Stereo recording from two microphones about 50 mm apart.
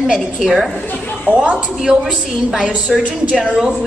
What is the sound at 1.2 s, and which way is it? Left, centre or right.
A woman's voice, right.